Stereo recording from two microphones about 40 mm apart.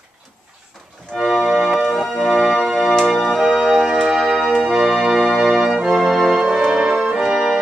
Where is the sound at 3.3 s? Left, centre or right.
Centre.